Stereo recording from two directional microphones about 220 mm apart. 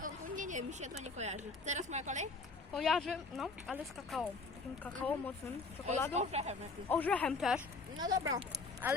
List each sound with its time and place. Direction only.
0.0 s a sound: 35° right (ahead or behind)
1.1 s speech: 30° right (ahead or behind)
2.7 s speech: centre (ahead or behind)
6.1 s speech: 30° right (ahead or behind)
6.8 s speech: 10° left (ahead or behind)
7.9 s speech: 15° right (ahead or behind)